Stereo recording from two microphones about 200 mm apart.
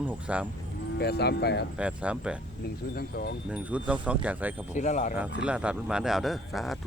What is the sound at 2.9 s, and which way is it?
Speech, 50° left (ahead or behind).